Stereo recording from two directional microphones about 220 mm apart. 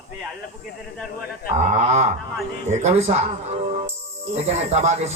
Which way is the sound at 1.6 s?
30° right (ahead or behind).